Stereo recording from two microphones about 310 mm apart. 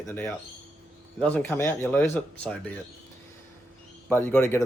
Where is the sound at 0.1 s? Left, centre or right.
Centre.